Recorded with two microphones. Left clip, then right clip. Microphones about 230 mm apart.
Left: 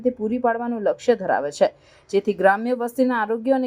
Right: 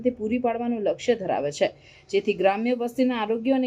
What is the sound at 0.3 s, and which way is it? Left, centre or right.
A woman's voice, left.